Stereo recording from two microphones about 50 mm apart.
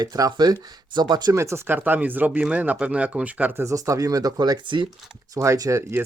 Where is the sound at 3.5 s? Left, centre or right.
Right.